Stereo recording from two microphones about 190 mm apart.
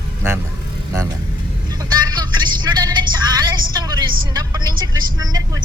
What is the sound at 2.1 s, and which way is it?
Vehicle, 20° right (ahead or behind).